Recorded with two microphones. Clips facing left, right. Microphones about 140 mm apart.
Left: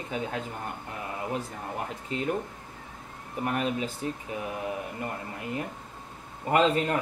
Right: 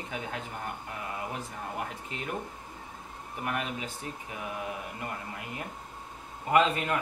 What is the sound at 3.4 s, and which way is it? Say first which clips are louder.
Speech: left 5 dB; 35° left (ahead or behind).